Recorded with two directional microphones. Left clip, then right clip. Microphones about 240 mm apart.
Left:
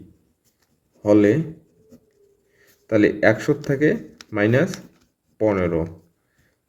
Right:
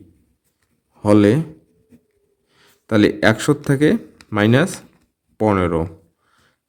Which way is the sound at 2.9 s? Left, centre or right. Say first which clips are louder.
Right 1 dB; right.